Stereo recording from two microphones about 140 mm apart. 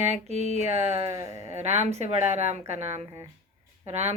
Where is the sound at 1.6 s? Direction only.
50° right (ahead or behind).